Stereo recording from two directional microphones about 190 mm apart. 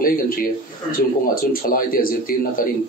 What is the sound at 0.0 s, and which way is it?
Speech, 50° left (ahead or behind).